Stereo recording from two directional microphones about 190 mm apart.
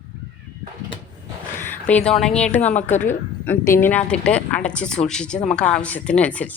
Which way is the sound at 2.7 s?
35° left (ahead or behind).